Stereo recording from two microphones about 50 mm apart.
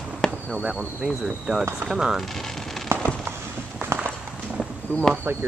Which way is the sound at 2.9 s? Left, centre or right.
Right.